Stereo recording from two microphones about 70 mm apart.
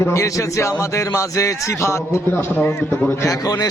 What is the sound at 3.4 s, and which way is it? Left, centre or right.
Speech, left.